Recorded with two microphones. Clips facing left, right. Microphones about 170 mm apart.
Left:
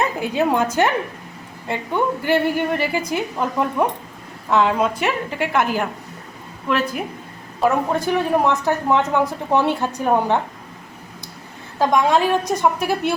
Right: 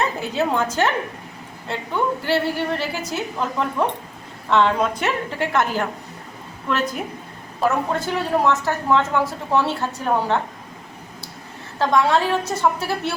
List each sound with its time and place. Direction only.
0.2 s a woman's voice: 15° left (ahead or behind)
2.2 s a woman's voice: 15° left (ahead or behind)
11.8 s a woman's voice: 15° left (ahead or behind)